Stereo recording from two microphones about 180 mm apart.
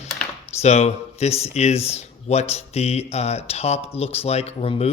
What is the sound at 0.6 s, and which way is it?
Speech, 35° left (ahead or behind).